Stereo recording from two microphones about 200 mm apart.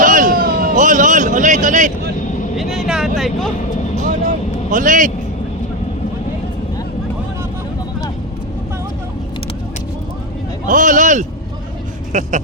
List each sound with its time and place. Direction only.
0.0 s a sound: 40° right (ahead or behind)
2.6 s vehicle: centre (ahead or behind)
3.2 s speech: centre (ahead or behind)
4.7 s a man's voice: 40° right (ahead or behind)
10.7 s a man's voice: 40° right (ahead or behind)